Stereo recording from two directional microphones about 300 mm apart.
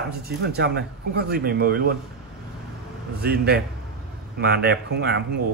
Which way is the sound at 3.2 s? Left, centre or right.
Right.